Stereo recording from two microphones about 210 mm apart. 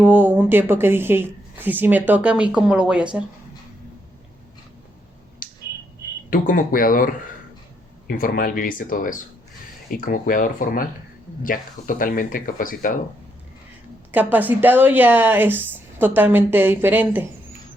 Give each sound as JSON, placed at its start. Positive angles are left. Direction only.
{"t": 0.0, "sound": "speech", "side_deg": -10}
{"t": 5.4, "sound": "finger snapping", "side_deg": 40}
{"t": 6.3, "sound": "speech", "side_deg": 40}
{"t": 14.1, "sound": "speech", "side_deg": -10}